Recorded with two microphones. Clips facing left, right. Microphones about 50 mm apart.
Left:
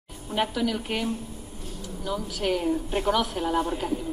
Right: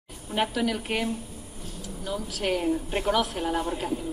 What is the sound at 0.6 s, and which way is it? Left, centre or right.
Speech, right.